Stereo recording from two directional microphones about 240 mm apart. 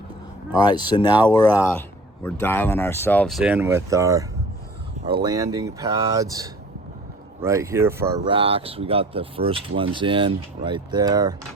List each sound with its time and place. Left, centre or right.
0.5 s speech: centre
8.3 s speech: right